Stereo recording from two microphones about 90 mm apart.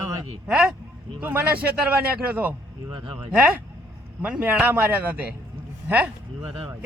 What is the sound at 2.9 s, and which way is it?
Speech, 60° right (ahead or behind).